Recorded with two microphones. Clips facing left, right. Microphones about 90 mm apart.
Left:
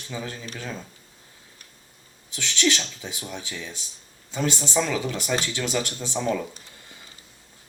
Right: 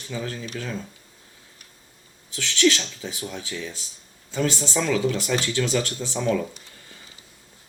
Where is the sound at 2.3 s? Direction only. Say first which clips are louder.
Right 4 dB; 20° left (ahead or behind).